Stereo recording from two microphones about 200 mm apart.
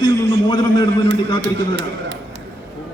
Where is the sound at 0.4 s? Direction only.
20° left (ahead or behind).